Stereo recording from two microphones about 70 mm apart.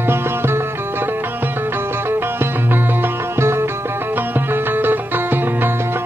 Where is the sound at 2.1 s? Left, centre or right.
Right.